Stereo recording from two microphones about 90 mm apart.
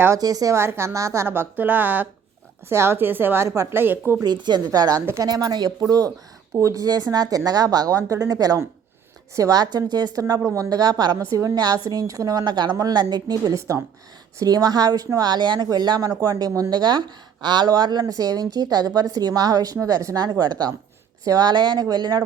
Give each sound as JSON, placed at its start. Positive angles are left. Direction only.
{"t": 0.2, "sound": "a woman's voice", "side_deg": -45}
{"t": 4.2, "sound": "speech", "side_deg": -50}
{"t": 11.2, "sound": "speech", "side_deg": -35}
{"t": 12.5, "sound": "speech", "side_deg": -50}
{"t": 15.3, "sound": "speech", "side_deg": -55}